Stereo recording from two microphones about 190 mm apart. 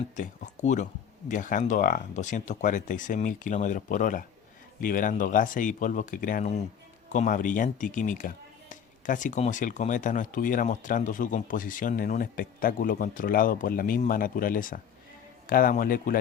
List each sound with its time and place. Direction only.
0.2 s speech: 40° left (ahead or behind)